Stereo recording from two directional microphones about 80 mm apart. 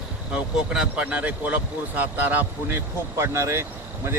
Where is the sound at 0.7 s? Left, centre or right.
Centre.